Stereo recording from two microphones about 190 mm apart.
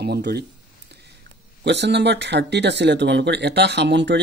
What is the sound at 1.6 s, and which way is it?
Speech, 65° right (ahead or behind).